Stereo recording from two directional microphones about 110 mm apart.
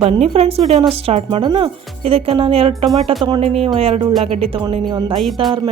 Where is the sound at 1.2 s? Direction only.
50° right (ahead or behind).